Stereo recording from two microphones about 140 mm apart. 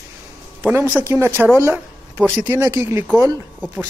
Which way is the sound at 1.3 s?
15° left (ahead or behind).